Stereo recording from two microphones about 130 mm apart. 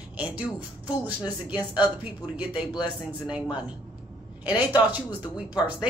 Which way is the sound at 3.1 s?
10° right (ahead or behind).